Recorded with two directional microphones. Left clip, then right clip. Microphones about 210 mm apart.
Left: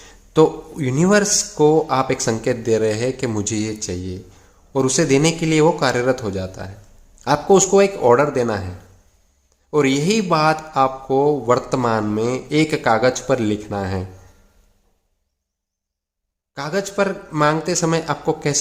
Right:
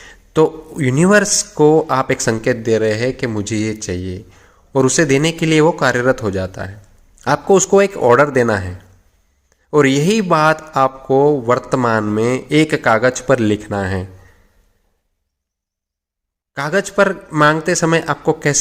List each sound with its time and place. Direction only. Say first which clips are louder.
0.0 s speech: right 1 dB; 15° right (ahead or behind)
16.6 s speech: right 6 dB; 15° right (ahead or behind)